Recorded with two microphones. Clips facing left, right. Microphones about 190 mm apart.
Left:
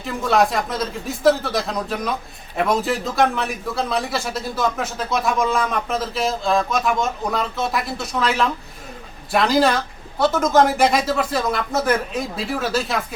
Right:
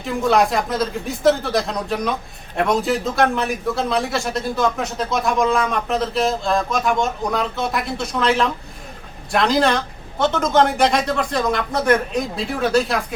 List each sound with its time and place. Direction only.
0.0 s speech: centre (ahead or behind)